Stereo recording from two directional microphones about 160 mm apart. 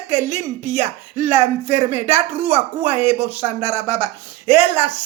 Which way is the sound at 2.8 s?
10° right (ahead or behind).